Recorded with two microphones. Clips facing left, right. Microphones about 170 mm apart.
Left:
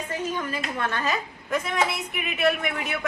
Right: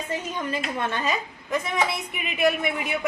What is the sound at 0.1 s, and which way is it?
A woman's voice, 25° right (ahead or behind).